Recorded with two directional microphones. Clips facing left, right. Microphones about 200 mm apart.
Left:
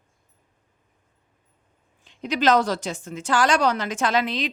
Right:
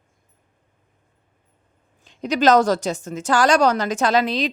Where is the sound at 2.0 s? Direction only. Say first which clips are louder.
Right 4 dB; 40° right (ahead or behind).